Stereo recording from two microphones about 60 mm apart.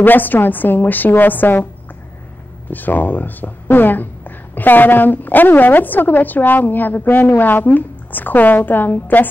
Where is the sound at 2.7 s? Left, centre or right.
Left.